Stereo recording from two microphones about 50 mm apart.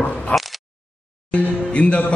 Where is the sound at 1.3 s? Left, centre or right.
Left.